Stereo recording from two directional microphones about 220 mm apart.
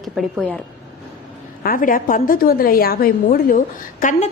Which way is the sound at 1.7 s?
40° left (ahead or behind).